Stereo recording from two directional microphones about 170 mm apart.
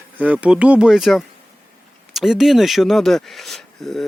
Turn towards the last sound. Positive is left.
turn(degrees=0)  # may be behind; listen again after turning